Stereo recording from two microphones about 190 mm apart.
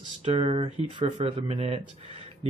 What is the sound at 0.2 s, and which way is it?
Speech, 30° right (ahead or behind).